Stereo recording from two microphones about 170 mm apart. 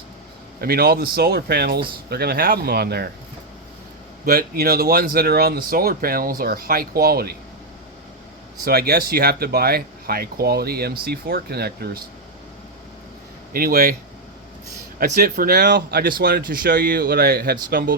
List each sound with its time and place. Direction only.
0.6 s speech: 70° right (ahead or behind)
4.3 s speech: 65° right (ahead or behind)
8.6 s speech: 65° right (ahead or behind)
13.5 s speech: 60° right (ahead or behind)
15.2 s speech: 65° right (ahead or behind)